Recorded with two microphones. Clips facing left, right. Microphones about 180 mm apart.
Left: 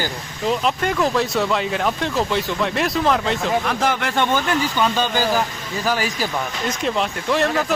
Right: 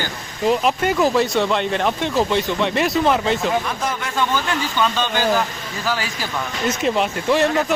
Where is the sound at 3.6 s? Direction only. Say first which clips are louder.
Left 4 dB; 70° left (ahead or behind).